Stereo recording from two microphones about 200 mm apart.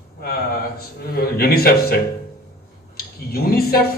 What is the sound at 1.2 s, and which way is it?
Speech, 50° left (ahead or behind).